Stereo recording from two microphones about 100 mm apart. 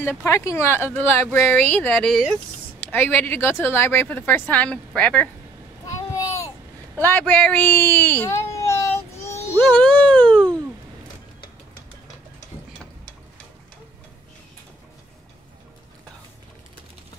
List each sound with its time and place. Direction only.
0.2 s speech: 25° left (ahead or behind)
6.1 s a sound: 30° left (ahead or behind)
7.0 s speech: 20° left (ahead or behind)
7.4 s child singing: 20° left (ahead or behind)
9.8 s speech: 10° left (ahead or behind)